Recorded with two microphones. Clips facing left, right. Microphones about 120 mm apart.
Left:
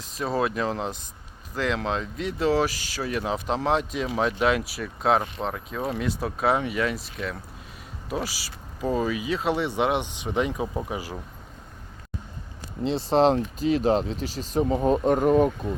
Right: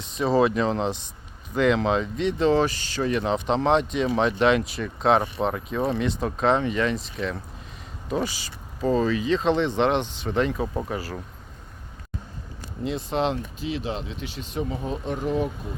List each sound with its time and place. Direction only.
0.0 s speech: centre (ahead or behind)
12.8 s speech: 30° left (ahead or behind); by 15.5 s 50° left (ahead or behind)